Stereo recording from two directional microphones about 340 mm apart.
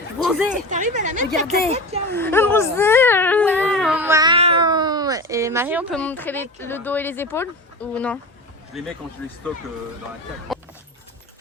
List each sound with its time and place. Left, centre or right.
0.3 s speech: centre
0.5 s speech: right
2.1 s speech: centre
10.5 s dog: centre